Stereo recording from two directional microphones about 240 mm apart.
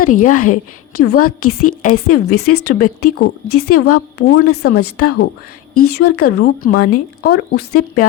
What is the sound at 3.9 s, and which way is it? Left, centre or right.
Speech, left.